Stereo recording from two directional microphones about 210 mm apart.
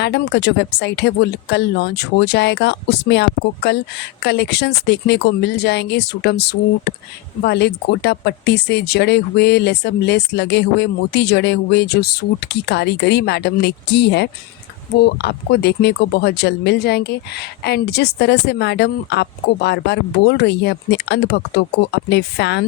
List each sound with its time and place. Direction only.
0.0 s speech: 55° left (ahead or behind)